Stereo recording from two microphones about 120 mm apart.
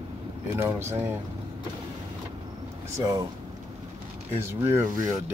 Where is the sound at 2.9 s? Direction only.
30° right (ahead or behind).